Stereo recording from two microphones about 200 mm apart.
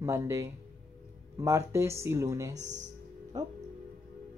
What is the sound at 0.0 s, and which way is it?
Speech, 15° right (ahead or behind).